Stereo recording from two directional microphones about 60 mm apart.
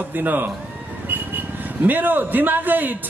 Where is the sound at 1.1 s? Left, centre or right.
Right.